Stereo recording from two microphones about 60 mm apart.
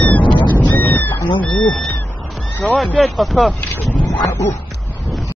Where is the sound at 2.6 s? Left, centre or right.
Centre.